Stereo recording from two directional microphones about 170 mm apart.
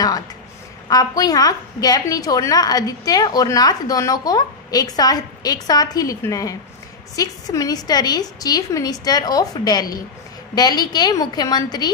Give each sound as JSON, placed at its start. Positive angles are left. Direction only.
{"t": 0.8, "sound": "a woman's voice", "side_deg": 20}